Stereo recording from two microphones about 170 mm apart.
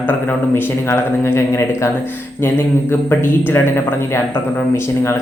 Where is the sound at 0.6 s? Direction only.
15° left (ahead or behind).